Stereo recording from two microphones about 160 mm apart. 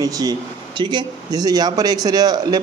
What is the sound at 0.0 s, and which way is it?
A man's voice, 25° right (ahead or behind).